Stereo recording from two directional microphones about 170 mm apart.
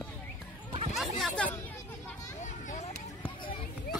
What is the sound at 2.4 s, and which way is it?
Children playing, 45° left (ahead or behind).